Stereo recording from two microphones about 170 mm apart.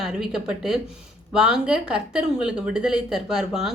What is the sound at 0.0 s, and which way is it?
A woman's voice, 5° right (ahead or behind).